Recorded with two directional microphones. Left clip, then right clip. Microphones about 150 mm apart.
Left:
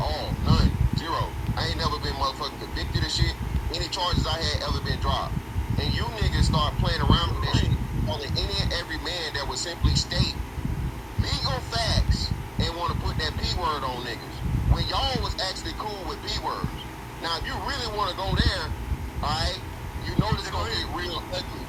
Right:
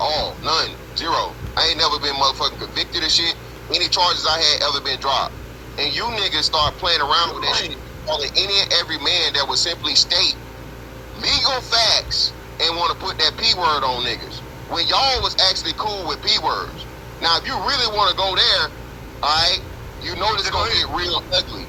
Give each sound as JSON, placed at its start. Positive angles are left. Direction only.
{"t": 0.0, "sound": "speech", "side_deg": -55}